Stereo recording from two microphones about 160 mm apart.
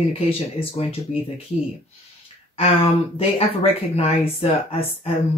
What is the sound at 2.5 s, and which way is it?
Speech, 35° left (ahead or behind).